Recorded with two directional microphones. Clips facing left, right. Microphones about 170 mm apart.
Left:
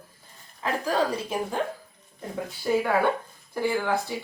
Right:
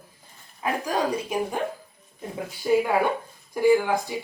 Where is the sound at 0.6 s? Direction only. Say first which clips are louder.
Even; 15° right (ahead or behind).